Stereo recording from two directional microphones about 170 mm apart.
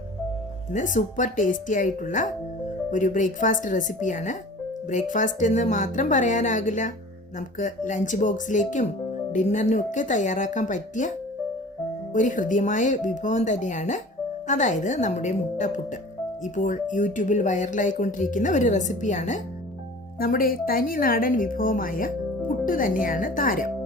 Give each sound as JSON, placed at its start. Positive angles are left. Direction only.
{"t": 0.7, "sound": "speech", "side_deg": 45}
{"t": 12.1, "sound": "speech", "side_deg": 50}
{"t": 20.1, "sound": "a woman's voice", "side_deg": 60}